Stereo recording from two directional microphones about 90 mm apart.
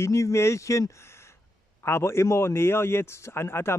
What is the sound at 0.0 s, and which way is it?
A man's voice, 30° left (ahead or behind).